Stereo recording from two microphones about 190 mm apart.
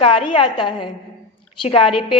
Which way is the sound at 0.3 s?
25° left (ahead or behind).